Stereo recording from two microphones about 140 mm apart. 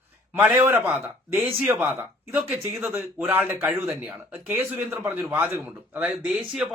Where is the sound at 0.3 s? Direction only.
10° right (ahead or behind).